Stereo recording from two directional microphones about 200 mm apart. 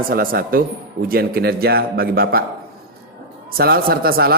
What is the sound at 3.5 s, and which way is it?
Speech, 50° right (ahead or behind).